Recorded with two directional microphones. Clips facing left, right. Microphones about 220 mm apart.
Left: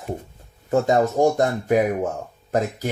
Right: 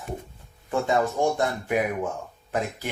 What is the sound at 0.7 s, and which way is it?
Speech, 40° left (ahead or behind).